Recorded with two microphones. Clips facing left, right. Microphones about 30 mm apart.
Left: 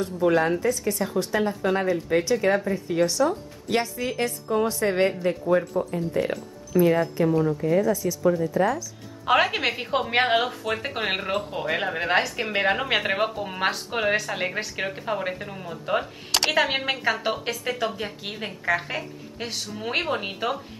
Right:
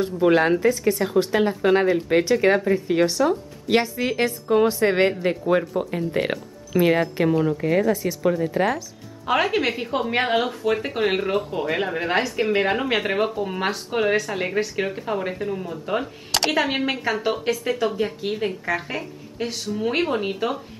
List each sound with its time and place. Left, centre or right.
0.3 s speech: right
5.8 s speech: right
7.5 s speech: right
7.8 s speech: right
9.2 s speech: centre